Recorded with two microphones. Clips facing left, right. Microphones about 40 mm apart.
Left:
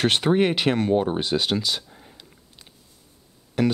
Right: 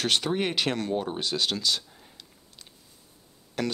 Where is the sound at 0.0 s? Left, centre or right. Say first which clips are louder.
Left 6 dB; left.